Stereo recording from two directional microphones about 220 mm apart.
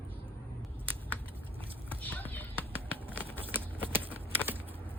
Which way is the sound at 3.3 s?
10° right (ahead or behind).